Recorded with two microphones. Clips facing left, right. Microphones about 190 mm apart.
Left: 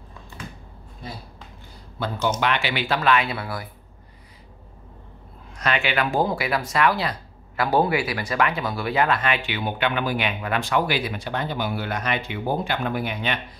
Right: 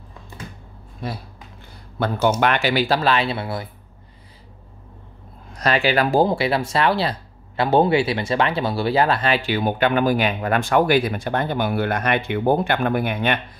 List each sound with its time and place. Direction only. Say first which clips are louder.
2.4 s speech: right 5 dB; 45° right (ahead or behind); by 3.6 s 25° right (ahead or behind)
5.5 s speech: right 5 dB; 35° right (ahead or behind); by 13.4 s 55° right (ahead or behind)